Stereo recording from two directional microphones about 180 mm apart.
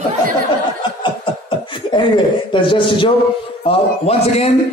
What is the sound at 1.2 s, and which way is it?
Beatboxing, 25° left (ahead or behind).